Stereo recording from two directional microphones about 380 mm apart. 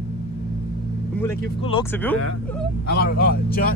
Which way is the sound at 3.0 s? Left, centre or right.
Left.